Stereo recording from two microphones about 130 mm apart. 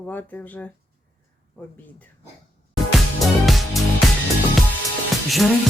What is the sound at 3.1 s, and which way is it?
Music, centre (ahead or behind).